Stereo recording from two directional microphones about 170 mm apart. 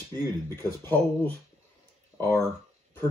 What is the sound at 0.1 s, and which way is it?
Speech, 15° left (ahead or behind).